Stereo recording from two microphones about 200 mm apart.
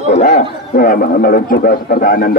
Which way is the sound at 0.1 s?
45° left (ahead or behind).